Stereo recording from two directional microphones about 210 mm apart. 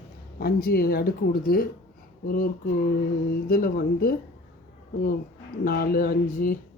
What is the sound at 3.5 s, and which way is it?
Speech, 45° left (ahead or behind).